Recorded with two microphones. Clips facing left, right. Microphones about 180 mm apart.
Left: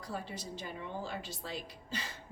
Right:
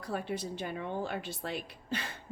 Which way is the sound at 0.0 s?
60° right (ahead or behind).